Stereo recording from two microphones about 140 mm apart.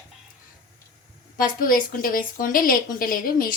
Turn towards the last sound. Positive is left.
turn(degrees=90)